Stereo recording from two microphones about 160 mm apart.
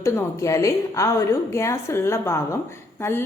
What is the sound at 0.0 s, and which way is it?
A woman's voice, 20° left (ahead or behind).